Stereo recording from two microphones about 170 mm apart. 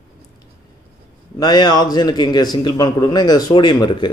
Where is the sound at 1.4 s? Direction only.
25° left (ahead or behind).